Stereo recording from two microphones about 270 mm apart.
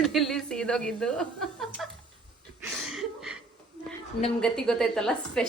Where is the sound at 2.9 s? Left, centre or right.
Centre.